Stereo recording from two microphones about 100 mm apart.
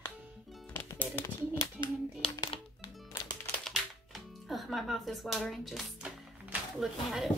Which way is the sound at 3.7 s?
Centre (ahead or behind).